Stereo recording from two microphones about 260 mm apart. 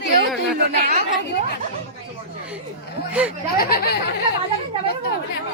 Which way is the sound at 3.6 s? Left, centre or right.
Left.